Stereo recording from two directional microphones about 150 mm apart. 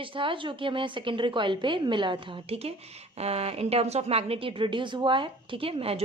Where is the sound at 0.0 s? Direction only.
35° right (ahead or behind).